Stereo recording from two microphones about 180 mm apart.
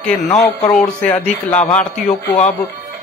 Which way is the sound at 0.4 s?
10° left (ahead or behind).